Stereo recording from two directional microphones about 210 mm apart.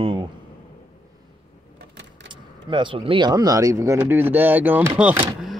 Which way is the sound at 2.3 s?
20° right (ahead or behind).